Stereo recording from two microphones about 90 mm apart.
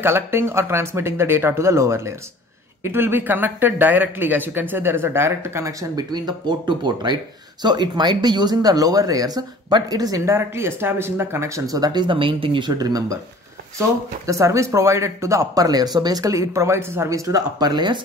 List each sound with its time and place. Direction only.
0.0 s speech: 25° right (ahead or behind); by 10.3 s 40° right (ahead or behind)
10.3 s speech: 30° right (ahead or behind); by 17.9 s 50° right (ahead or behind)